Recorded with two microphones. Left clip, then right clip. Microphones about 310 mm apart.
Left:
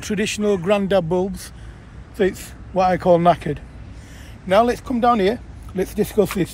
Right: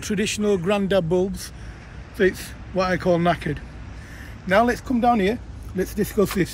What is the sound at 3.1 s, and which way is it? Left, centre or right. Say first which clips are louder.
Speech: left 6 dB; left.